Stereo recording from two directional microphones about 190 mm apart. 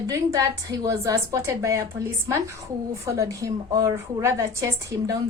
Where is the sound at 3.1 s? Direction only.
15° right (ahead or behind).